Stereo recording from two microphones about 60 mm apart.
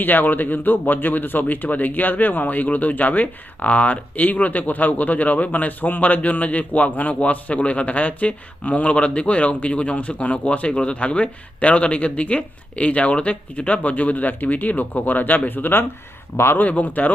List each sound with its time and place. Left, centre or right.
0.0 s speech: left